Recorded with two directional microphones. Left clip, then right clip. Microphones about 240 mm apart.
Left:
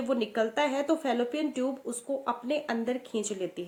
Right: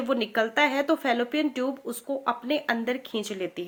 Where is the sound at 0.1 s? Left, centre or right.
Right.